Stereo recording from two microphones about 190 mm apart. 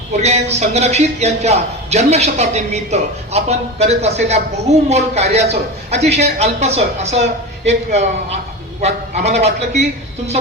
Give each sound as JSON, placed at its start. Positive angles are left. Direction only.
{"t": 0.2, "sound": "a man's voice", "side_deg": -35}